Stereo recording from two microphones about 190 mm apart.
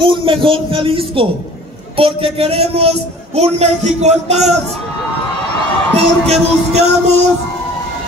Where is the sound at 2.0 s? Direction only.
30° right (ahead or behind).